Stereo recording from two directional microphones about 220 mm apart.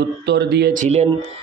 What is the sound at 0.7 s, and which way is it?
Speech, 30° right (ahead or behind).